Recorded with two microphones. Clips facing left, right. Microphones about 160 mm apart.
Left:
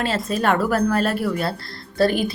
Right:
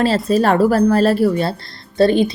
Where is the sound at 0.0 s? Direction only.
35° right (ahead or behind).